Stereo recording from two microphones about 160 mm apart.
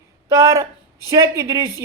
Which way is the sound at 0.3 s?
20° right (ahead or behind).